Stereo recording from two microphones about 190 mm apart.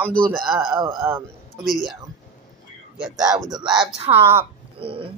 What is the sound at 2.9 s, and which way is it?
Speech, 5° right (ahead or behind).